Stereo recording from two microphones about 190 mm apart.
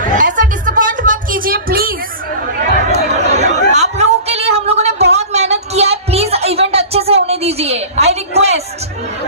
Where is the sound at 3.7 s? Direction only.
35° right (ahead or behind).